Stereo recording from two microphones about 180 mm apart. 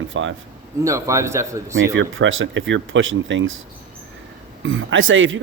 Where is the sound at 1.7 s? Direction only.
90° right.